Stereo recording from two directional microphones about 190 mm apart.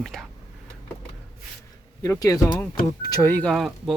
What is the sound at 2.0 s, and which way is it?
Speech, 15° left (ahead or behind).